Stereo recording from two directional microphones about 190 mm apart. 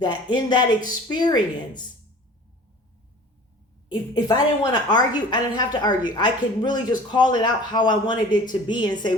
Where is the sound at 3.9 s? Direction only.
20° left (ahead or behind).